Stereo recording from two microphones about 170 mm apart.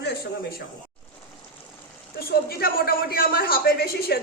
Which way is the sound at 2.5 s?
65° left (ahead or behind).